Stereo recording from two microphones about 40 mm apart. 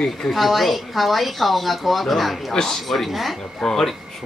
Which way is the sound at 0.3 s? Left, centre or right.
Centre.